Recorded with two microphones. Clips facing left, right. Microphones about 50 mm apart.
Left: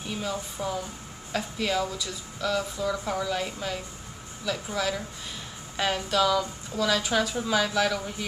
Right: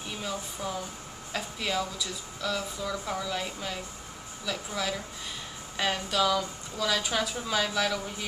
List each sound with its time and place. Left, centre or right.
0.2 s a woman's voice: centre